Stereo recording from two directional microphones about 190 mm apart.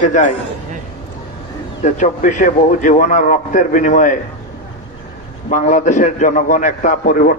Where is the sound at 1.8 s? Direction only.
40° left (ahead or behind).